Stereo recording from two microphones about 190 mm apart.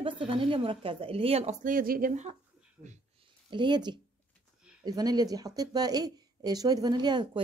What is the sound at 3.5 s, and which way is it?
A woman's voice, 25° right (ahead or behind).